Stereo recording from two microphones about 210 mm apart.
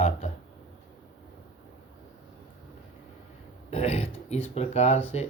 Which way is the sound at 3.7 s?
30° left (ahead or behind).